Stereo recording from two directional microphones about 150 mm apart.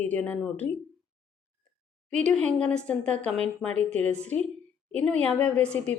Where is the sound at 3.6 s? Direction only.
45° right (ahead or behind).